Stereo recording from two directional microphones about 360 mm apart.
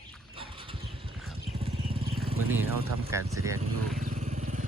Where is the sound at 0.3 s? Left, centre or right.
Centre.